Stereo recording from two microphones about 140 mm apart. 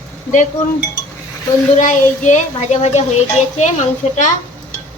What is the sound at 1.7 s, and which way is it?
A woman's voice, 60° left (ahead or behind).